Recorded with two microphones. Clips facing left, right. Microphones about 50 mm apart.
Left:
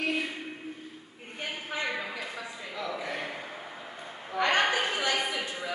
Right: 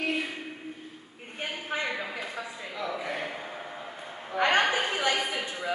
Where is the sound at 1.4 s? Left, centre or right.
Right.